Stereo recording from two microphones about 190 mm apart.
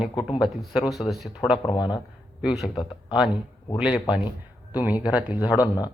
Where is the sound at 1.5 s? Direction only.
25° left (ahead or behind).